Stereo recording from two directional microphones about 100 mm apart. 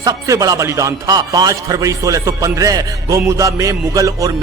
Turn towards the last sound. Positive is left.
turn(degrees=-35)  # may be behind; listen again after turning